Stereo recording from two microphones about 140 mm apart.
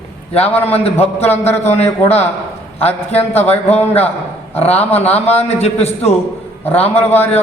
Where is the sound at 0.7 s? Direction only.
45° left (ahead or behind).